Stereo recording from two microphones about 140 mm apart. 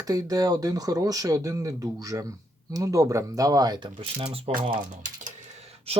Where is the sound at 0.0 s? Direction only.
25° right (ahead or behind); by 4.8 s 45° right (ahead or behind).